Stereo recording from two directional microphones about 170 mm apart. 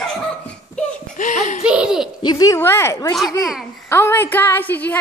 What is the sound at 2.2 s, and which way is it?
Speech, 25° left (ahead or behind).